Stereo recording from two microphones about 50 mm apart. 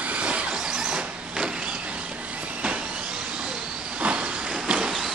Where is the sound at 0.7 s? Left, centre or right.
Centre.